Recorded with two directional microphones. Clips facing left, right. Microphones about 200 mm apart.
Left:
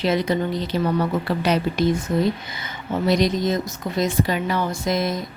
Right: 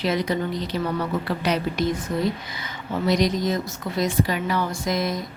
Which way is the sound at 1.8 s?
30° left (ahead or behind).